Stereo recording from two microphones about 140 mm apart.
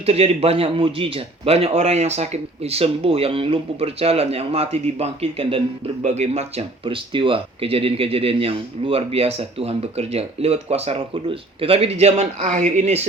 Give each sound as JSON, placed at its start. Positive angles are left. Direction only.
{"t": 0.0, "sound": "a man's voice", "side_deg": -45}